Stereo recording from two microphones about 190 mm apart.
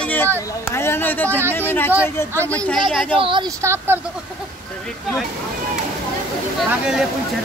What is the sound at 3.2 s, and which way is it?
Speech, 25° right (ahead or behind).